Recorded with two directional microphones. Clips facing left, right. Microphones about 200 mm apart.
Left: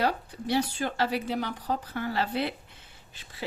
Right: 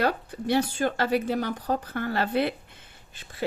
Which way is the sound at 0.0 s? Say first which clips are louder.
Right 2 dB; 55° right (ahead or behind).